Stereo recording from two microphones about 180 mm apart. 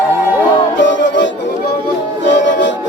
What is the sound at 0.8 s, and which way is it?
Music, 90° left.